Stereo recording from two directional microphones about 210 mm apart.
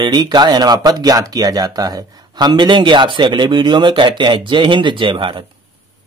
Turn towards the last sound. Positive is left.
turn(degrees=-25)  # may be behind; listen again after turning